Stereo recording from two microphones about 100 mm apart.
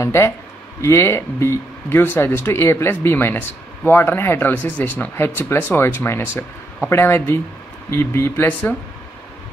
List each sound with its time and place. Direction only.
0.0 s speech: 30° left (ahead or behind)